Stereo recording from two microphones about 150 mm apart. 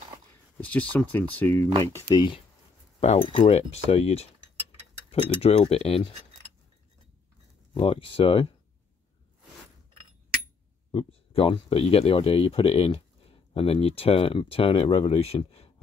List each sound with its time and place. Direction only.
0.6 s speech: 10° left (ahead or behind)
2.1 s speech: 30° left (ahead or behind)
3.0 s speech: 45° left (ahead or behind)
5.4 s speech: 40° left (ahead or behind)
7.7 s speech: 35° left (ahead or behind)
10.9 s speech: 40° left (ahead or behind)